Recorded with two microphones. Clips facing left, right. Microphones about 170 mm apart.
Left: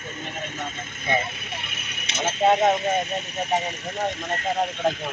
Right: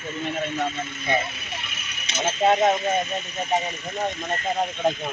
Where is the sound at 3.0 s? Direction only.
70° left (ahead or behind).